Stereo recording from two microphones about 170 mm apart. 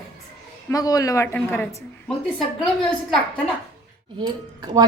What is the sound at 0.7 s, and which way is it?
Speech, 20° left (ahead or behind).